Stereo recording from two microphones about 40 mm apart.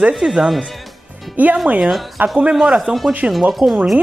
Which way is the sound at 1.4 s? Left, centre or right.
Right.